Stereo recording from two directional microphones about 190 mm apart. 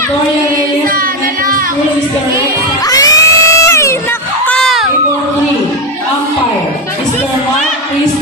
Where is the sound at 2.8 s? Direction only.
20° left (ahead or behind); by 4.9 s centre (ahead or behind).